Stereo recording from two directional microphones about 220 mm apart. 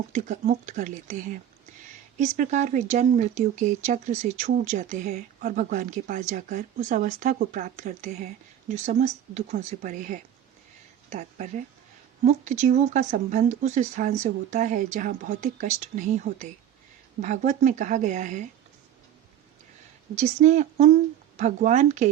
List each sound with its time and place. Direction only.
0.1 s speech: 35° right (ahead or behind)
20.1 s speech: 30° right (ahead or behind)